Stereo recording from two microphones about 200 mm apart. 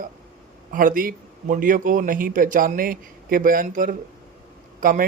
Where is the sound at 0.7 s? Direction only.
45° right (ahead or behind).